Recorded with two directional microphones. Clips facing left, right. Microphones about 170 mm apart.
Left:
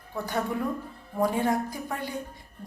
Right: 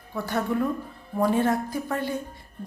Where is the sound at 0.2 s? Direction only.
15° left (ahead or behind).